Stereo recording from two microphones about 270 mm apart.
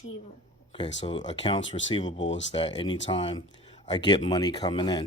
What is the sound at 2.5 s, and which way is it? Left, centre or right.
A man's voice, centre.